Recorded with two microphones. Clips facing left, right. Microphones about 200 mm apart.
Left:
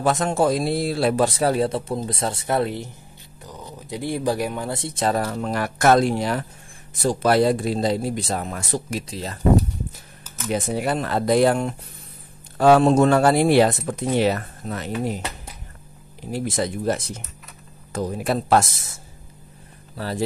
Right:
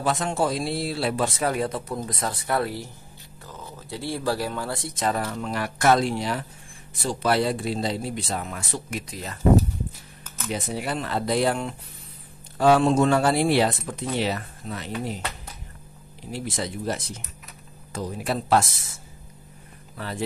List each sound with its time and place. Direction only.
0.0 s speech: 45° left (ahead or behind)
10.5 s speech: 50° left (ahead or behind)
16.3 s speech: 45° left (ahead or behind)
20.0 s speech: 35° left (ahead or behind)